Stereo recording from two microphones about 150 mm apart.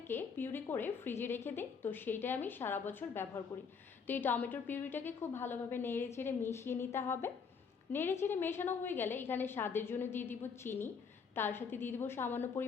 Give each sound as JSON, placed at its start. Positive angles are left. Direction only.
{"t": 0.1, "sound": "a woman's voice", "side_deg": 15}